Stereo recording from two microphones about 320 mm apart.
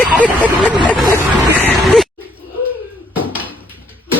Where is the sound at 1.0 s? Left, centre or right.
Centre.